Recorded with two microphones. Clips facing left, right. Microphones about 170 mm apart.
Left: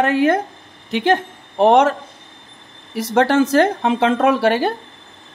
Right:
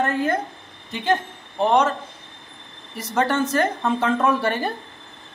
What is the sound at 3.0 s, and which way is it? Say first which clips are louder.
Speech: left 7 dB; 90° left.